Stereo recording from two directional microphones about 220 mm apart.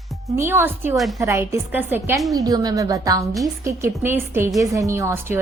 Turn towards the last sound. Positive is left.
turn(degrees=-10)  # may be behind; listen again after turning